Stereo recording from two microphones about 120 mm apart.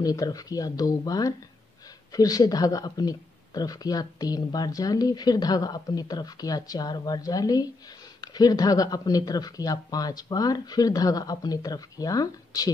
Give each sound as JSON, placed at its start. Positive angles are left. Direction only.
{"t": 0.0, "sound": "speech", "side_deg": 30}